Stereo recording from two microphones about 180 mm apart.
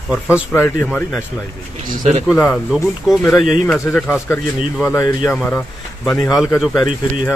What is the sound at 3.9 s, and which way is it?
A man's voice, 15° left (ahead or behind).